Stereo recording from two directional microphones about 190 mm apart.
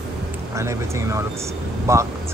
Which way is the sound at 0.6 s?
15° right (ahead or behind).